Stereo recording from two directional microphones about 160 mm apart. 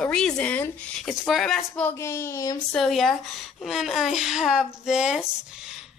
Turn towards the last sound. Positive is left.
turn(degrees=-5)  # may be behind; listen again after turning